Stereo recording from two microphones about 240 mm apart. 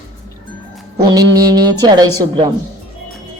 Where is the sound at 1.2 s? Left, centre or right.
Right.